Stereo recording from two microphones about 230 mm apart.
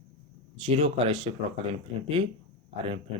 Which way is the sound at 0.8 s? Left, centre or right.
Right.